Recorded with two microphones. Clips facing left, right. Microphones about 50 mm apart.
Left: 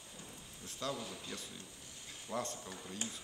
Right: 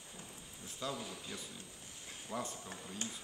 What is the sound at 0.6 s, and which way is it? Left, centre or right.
A man's voice, centre.